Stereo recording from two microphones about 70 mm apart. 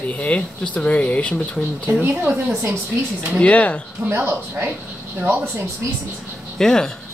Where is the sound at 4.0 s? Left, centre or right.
Right.